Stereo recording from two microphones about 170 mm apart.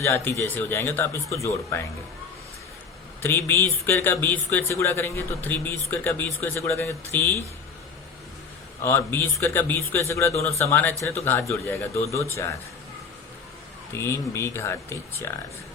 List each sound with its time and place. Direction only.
0.0 s speech: 15° left (ahead or behind)
3.2 s speech: 15° left (ahead or behind)
8.8 s speech: 15° left (ahead or behind)
13.9 s speech: 15° left (ahead or behind)